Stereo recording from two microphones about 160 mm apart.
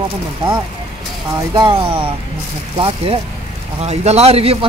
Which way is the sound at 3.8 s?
40° right (ahead or behind).